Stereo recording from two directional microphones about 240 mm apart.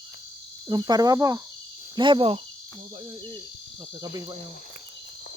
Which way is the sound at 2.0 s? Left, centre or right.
Centre.